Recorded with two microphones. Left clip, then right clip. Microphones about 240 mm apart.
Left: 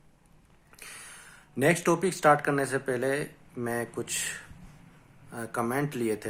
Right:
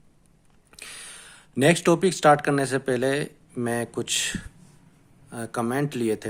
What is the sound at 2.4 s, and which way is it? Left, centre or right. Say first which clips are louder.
Speech: right 4 dB; right.